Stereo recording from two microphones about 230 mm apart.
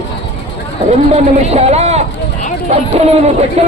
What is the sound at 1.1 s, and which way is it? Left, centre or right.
Speech, right.